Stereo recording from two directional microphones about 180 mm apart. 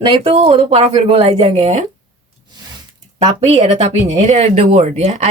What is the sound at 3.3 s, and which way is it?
Speech, 35° right (ahead or behind).